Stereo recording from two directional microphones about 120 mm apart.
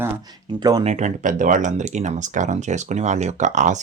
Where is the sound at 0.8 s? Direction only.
70° right (ahead or behind).